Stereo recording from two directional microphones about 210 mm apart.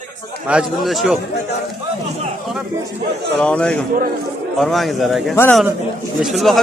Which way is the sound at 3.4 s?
5° left (ahead or behind).